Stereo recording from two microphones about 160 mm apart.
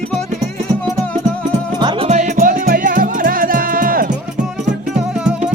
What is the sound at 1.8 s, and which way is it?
Music, 40° right (ahead or behind).